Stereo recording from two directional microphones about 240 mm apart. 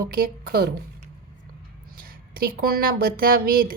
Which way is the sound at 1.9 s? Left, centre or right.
Right.